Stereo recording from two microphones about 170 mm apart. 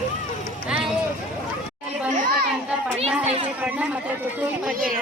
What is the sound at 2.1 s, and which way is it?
Children playing, 50° right (ahead or behind).